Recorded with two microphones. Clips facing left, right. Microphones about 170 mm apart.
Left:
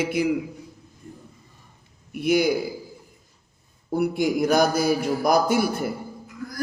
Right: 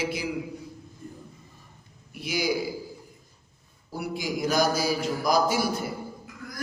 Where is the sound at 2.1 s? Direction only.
55° left (ahead or behind).